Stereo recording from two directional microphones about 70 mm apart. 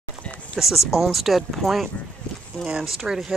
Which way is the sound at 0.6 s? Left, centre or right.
Centre.